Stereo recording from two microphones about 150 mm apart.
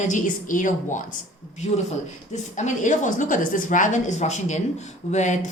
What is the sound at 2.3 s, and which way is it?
A woman's voice, 55° left (ahead or behind).